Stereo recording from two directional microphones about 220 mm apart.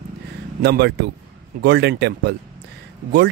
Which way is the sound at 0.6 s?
45° right (ahead or behind).